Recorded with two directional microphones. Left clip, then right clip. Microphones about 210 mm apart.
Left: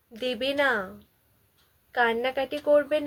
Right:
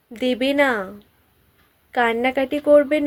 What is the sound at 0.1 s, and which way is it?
Speech, 35° right (ahead or behind).